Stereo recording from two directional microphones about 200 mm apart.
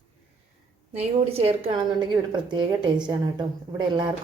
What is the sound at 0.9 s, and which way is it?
A woman's voice, 30° right (ahead or behind).